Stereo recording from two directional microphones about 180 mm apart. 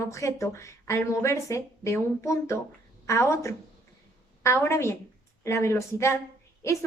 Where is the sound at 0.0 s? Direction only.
15° left (ahead or behind).